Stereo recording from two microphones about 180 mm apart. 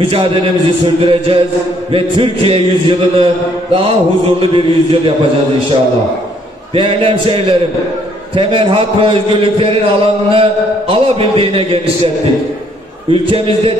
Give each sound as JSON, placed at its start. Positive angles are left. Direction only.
{"t": 0.0, "sound": "a man's voice", "side_deg": -30}
{"t": 4.4, "sound": "a man's voice", "side_deg": -30}
{"t": 6.7, "sound": "a man's voice", "side_deg": -30}
{"t": 13.1, "sound": "a man's voice", "side_deg": -30}